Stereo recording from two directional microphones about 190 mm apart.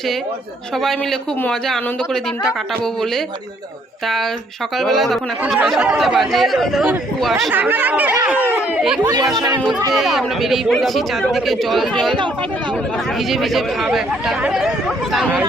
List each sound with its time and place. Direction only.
0.8 s speech: centre (ahead or behind)
9.0 s speech: 20° right (ahead or behind)
9.6 s speech: centre (ahead or behind)
13.1 s speech: centre (ahead or behind)